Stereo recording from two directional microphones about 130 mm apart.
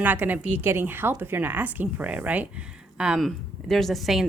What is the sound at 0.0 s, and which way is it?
Speech, 15° right (ahead or behind).